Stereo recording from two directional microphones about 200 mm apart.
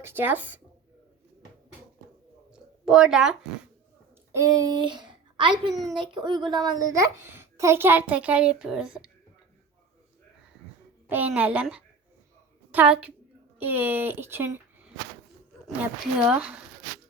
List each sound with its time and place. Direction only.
0.0 s a child's voice: 10° right (ahead or behind)
2.8 s speech: 5° right (ahead or behind)
4.3 s a woman's voice: 15° right (ahead or behind)
5.7 s speech: centre (ahead or behind)
6.0 s a child's voice: 25° right (ahead or behind); by 9.0 s 5° right (ahead or behind)
11.1 s a child's voice: 10° right (ahead or behind)
15.6 s speech: 5° right (ahead or behind)